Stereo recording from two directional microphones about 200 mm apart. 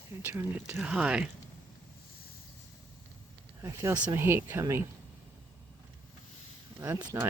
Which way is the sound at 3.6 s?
15° right (ahead or behind).